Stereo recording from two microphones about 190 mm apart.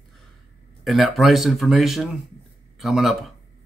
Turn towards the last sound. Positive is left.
turn(degrees=0)  # may be behind; listen again after turning